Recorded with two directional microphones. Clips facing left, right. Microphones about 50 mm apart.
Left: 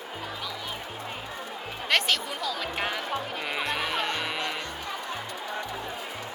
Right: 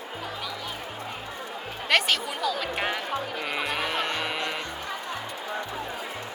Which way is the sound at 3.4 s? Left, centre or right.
Centre.